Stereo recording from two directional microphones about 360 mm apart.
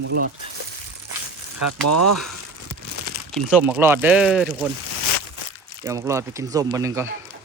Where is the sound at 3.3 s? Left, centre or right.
Centre.